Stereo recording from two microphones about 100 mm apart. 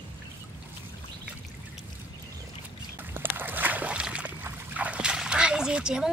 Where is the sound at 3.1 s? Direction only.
20° right (ahead or behind).